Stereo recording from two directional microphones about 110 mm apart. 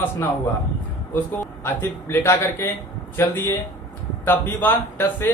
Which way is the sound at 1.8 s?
20° left (ahead or behind).